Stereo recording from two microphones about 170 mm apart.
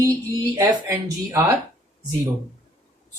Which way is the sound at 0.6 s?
15° right (ahead or behind).